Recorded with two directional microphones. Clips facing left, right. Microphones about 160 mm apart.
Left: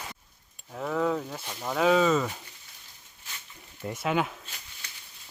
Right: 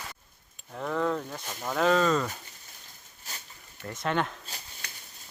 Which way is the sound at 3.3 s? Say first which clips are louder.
Right 2 dB; 40° right (ahead or behind).